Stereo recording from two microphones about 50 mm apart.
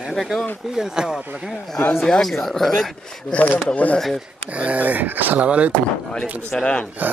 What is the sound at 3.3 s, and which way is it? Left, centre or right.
Speech, left.